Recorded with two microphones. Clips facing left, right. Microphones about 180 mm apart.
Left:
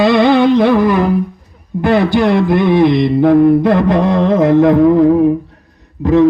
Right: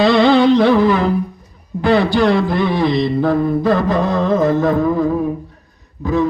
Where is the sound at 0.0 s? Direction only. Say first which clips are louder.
Left 2 dB; 15° left (ahead or behind).